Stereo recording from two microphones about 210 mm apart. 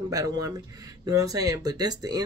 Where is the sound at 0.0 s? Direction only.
20° right (ahead or behind).